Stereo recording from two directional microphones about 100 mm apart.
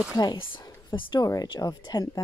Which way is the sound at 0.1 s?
40° left (ahead or behind).